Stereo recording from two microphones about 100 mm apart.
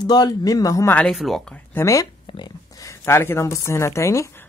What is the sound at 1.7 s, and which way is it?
Speech, 30° left (ahead or behind).